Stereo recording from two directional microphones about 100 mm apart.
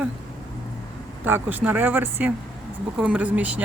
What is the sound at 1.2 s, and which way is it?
Speech, 20° right (ahead or behind).